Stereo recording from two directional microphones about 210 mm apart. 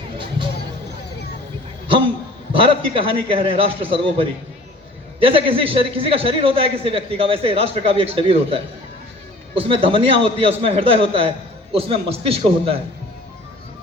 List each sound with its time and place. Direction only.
2.5 s a man's voice: 25° right (ahead or behind)